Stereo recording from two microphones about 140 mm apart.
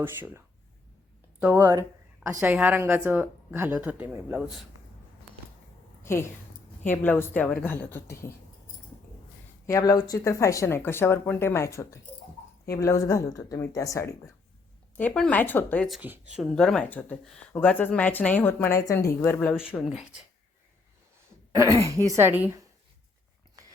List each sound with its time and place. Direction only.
0.0 s a woman's voice: 15° right (ahead or behind)
6.0 s a sound: 20° left (ahead or behind)
6.8 s speech: 15° left (ahead or behind)
9.6 s speech: 25° left (ahead or behind)
14.9 s speech: 10° left (ahead or behind)
16.0 s a woman's voice: 10° right (ahead or behind)
16.4 s speech: centre (ahead or behind)
21.5 s a woman's voice: 25° right (ahead or behind)